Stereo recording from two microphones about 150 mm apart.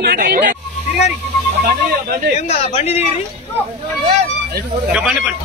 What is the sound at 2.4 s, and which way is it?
Speech, 45° left (ahead or behind).